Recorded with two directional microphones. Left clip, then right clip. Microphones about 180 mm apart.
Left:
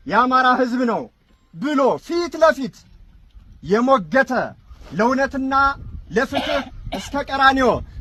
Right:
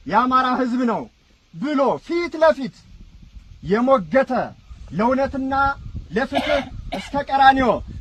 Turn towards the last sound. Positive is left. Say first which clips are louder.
# right 1 dB
turn(degrees=-55)  # may be behind; listen again after turning